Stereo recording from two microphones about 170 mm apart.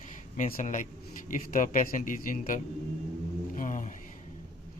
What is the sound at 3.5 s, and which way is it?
Mantra, 50° left (ahead or behind).